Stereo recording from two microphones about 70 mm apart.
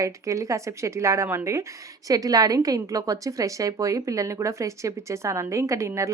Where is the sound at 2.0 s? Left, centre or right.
Right.